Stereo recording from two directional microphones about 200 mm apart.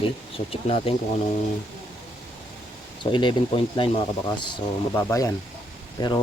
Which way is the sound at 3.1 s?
25° left (ahead or behind).